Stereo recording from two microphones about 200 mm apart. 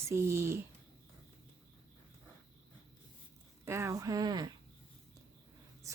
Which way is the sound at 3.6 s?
15° right (ahead or behind).